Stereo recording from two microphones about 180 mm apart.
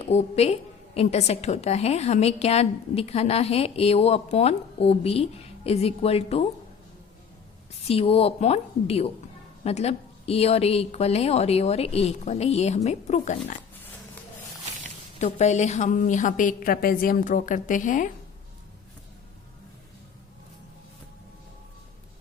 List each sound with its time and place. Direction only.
0.0 s a woman's voice: 35° left (ahead or behind)
7.9 s a woman's voice: 35° left (ahead or behind)
15.2 s a woman's voice: 40° left (ahead or behind)